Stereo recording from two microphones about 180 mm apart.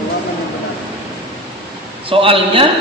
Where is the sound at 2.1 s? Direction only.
30° right (ahead or behind).